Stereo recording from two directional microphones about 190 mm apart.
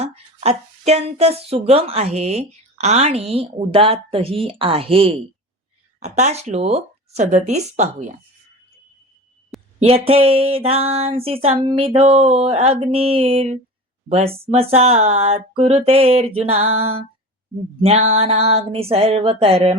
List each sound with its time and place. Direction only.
0.0 s speech: 35° right (ahead or behind)
9.8 s speech: 30° right (ahead or behind)